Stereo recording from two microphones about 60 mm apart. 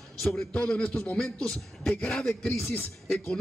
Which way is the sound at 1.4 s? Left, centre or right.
Centre.